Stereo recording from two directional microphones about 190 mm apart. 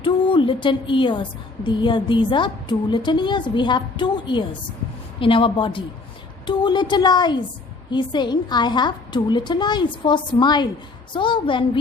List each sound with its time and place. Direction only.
0.0 s a woman's voice: 25° left (ahead or behind)